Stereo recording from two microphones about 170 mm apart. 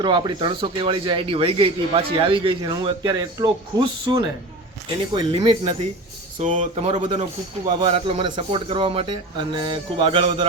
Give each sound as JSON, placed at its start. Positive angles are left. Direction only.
{"t": 0.0, "sound": "a man's voice", "side_deg": -25}
{"t": 6.4, "sound": "a man's voice", "side_deg": -45}